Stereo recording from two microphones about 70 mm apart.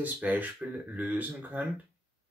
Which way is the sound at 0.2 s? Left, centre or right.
Centre.